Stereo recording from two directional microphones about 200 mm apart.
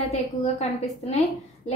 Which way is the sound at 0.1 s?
35° left (ahead or behind).